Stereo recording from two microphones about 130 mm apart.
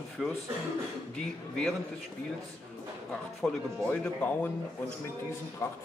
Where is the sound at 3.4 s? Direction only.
10° left (ahead or behind).